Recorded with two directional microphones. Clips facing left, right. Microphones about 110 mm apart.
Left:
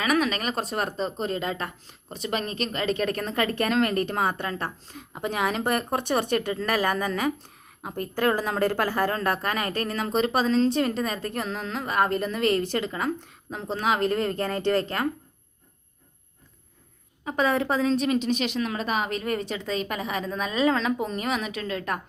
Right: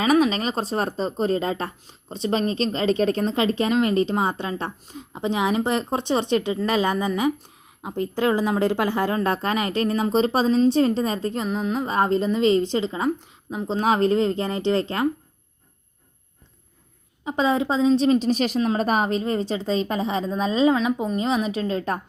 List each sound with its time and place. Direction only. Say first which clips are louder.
0.0 s a woman's voice: right 5 dB; 30° right (ahead or behind)
13.8 s a woman's voice: right 5 dB; 35° right (ahead or behind)
17.2 s a woman's voice: right 2 dB; 20° right (ahead or behind); by 19.1 s 40° right (ahead or behind)
19.1 s a woman's voice: right 5 dB; 25° right (ahead or behind)
20.7 s a woman's voice: right 4 dB; 15° right (ahead or behind); by 22.0 s 30° right (ahead or behind)